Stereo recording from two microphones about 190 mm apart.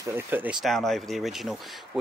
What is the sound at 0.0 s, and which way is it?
Speech, 10° right (ahead or behind).